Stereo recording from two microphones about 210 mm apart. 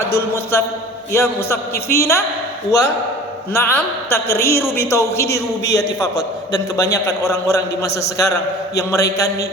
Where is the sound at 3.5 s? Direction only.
10° left (ahead or behind).